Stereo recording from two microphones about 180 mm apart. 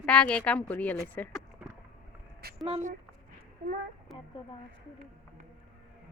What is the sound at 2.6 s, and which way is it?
Speech, 40° right (ahead or behind).